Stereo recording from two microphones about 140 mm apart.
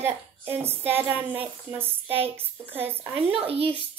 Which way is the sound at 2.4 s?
45° right (ahead or behind).